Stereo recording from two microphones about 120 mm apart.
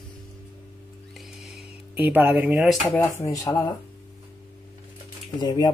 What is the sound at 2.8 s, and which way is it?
Speech, 15° left (ahead or behind).